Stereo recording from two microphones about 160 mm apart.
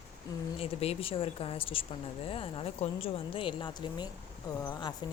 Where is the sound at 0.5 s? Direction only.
40° left (ahead or behind).